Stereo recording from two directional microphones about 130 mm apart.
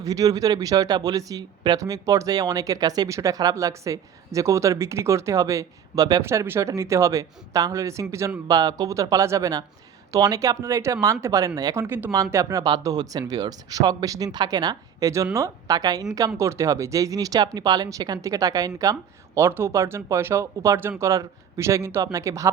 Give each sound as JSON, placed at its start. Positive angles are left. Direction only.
{"t": 0.0, "sound": "speech", "side_deg": -25}